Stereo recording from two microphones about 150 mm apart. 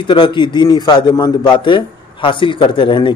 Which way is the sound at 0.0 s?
30° left (ahead or behind).